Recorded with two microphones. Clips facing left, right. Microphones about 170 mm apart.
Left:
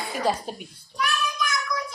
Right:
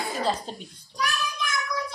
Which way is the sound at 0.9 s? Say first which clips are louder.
Left 2 dB; 35° right (ahead or behind).